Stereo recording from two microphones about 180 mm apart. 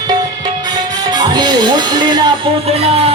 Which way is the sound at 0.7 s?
20° right (ahead or behind).